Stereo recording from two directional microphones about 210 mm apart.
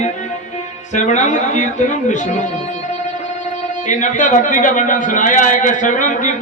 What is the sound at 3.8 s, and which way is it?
A man's voice, 35° left (ahead or behind).